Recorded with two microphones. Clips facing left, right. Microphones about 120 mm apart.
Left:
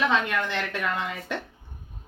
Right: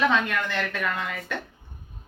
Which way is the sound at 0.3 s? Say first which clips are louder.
Even; 20° left (ahead or behind).